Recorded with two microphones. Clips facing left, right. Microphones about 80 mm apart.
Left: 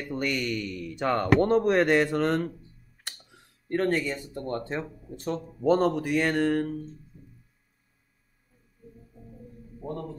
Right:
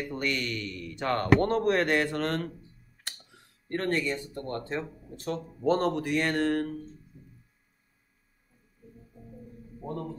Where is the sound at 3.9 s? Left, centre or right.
Centre.